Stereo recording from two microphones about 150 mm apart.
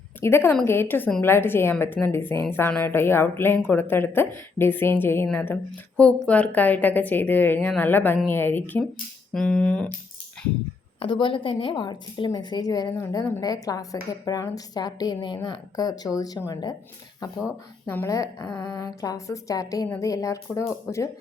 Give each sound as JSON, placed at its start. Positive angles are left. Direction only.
{"t": 0.2, "sound": "a woman's voice", "side_deg": 15}
{"t": 9.3, "sound": "a sound", "side_deg": 5}
{"t": 11.0, "sound": "a woman's voice", "side_deg": 35}
{"t": 17.9, "sound": "a woman's voice", "side_deg": 20}